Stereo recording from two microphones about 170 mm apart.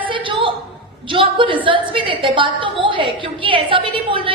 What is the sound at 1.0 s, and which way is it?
A woman's voice, 30° right (ahead or behind).